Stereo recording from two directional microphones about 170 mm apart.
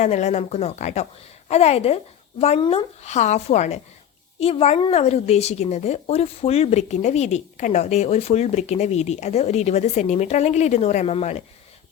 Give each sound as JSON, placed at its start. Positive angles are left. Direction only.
{"t": 0.0, "sound": "a woman's voice", "side_deg": 45}